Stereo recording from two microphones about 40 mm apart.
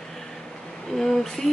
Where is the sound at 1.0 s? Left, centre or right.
Centre.